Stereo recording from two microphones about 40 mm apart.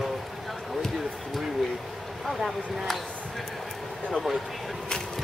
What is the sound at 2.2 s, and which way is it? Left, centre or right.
Speech, centre.